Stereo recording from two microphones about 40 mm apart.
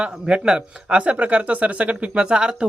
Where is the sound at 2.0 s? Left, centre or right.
Right.